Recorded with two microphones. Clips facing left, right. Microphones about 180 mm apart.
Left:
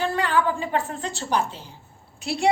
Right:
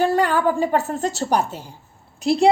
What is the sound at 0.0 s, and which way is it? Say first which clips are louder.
A woman's voice: right 5 dB; 45° right (ahead or behind).